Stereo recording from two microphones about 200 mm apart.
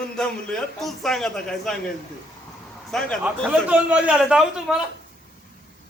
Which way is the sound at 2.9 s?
Centre (ahead or behind).